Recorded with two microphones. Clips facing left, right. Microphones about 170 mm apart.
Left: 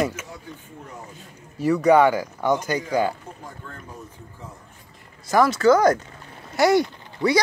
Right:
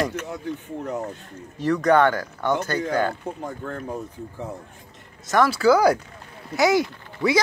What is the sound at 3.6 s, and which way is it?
Speech, 65° right (ahead or behind).